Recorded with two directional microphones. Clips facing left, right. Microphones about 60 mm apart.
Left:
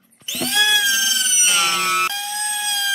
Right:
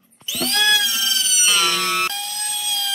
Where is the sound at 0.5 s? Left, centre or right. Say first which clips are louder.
Left 2 dB; centre.